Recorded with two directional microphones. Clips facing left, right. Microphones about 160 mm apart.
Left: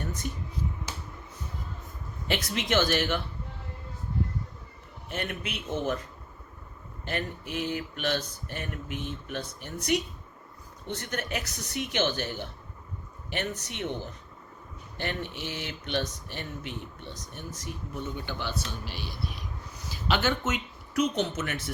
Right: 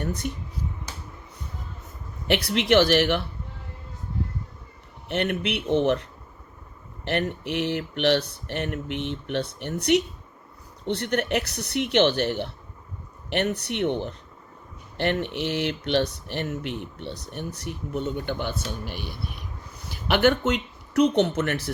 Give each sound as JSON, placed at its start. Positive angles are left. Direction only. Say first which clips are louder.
{"t": 0.0, "sound": "a sound", "louder": "right 6 dB", "side_deg": -65}
{"t": 2.2, "sound": "speech", "louder": "right 7 dB", "side_deg": -65}
{"t": 5.0, "sound": "speech", "louder": "right 9 dB", "side_deg": -65}